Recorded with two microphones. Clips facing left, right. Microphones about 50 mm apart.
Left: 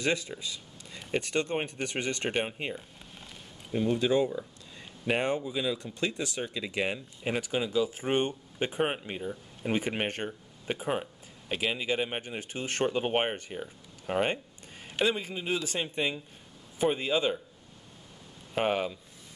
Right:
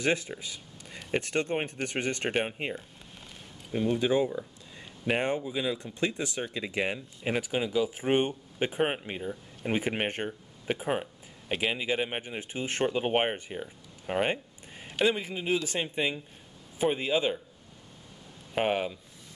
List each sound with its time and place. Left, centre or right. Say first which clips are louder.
0.0 s speech: right 1 dB; right
0.4 s a sound: left 2 dB; right
1.3 s speech: even; right
2.2 s speech: right 1 dB; centre
6.9 s speech: right 1 dB; centre
18.5 s speech: even; centre